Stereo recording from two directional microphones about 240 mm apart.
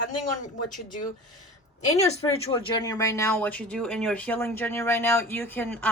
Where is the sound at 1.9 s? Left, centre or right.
Left.